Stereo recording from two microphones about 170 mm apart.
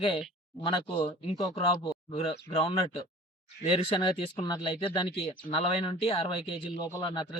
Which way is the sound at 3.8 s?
30° left (ahead or behind).